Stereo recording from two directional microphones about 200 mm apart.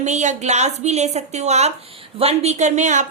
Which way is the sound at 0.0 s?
35° right (ahead or behind).